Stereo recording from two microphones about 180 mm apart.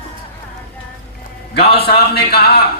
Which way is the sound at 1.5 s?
60° left (ahead or behind).